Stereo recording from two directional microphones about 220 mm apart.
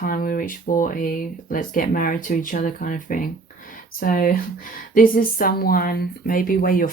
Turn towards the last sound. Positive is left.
turn(degrees=40)  # may be behind; listen again after turning